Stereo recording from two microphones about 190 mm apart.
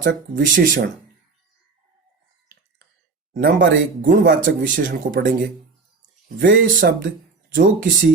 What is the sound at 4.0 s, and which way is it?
Speech, 45° right (ahead or behind).